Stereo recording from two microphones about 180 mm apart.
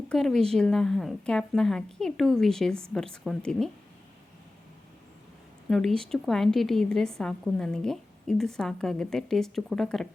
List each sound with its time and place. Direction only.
0.1 s a woman's voice: centre (ahead or behind)
5.6 s a woman's voice: centre (ahead or behind)